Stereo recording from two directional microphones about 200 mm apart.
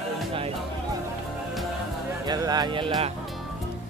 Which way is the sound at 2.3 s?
20° right (ahead or behind).